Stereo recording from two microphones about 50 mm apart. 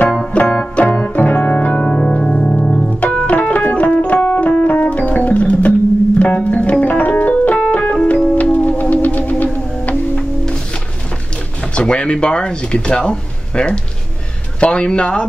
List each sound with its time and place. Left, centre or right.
0.1 s keyboard: centre
8.4 s music: left
11.7 s speech: left